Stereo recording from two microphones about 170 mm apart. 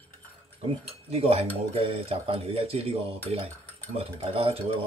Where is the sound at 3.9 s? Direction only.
35° right (ahead or behind).